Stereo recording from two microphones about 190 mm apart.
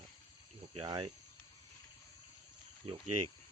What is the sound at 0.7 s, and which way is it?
Speech, 25° right (ahead or behind).